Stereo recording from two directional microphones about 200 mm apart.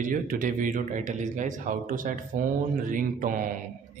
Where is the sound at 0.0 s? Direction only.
45° right (ahead or behind).